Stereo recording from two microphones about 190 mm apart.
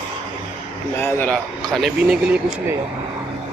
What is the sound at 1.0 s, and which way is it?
A man's voice, 10° left (ahead or behind).